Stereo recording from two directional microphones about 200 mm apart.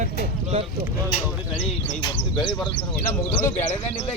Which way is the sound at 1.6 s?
25° left (ahead or behind).